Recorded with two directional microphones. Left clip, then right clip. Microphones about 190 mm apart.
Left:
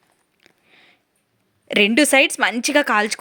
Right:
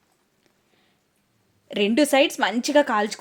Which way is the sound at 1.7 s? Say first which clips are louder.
Left 5 dB; 15° left (ahead or behind).